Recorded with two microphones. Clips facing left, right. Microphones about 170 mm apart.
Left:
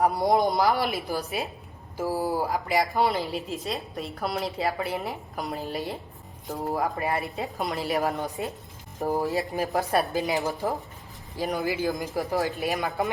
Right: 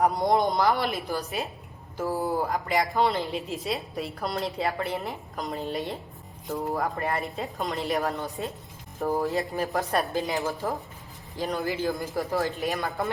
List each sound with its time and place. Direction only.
0.0 s a woman's voice: 5° left (ahead or behind)
8.0 s a man's voice: 15° left (ahead or behind)
9.2 s a woman's voice: centre (ahead or behind)
10.4 s a man's voice: 15° left (ahead or behind)
12.4 s a woman's voice: centre (ahead or behind)